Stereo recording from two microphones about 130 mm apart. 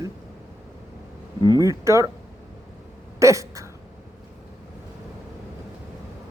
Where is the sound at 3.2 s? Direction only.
25° right (ahead or behind).